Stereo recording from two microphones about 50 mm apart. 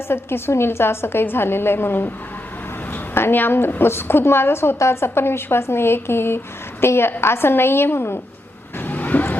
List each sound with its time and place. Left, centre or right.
0.1 s a woman's voice: left
8.8 s vehicle: left